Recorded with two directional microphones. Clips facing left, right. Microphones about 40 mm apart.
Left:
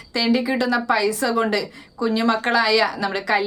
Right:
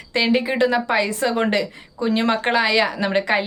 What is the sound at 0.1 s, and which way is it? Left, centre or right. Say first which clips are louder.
A woman's voice: right 1 dB; right.